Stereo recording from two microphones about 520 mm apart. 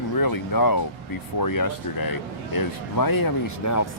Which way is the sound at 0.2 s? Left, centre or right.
Left.